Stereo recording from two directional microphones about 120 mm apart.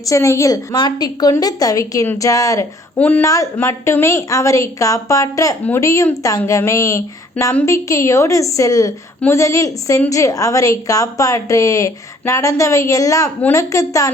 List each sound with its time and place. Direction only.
0.0 s a woman's voice: 25° left (ahead or behind)
3.0 s speech: 15° left (ahead or behind)
3.2 s a woman's voice: 25° left (ahead or behind)